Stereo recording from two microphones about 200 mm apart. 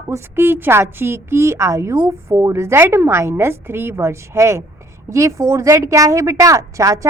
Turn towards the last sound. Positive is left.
turn(degrees=-15)  # may be behind; listen again after turning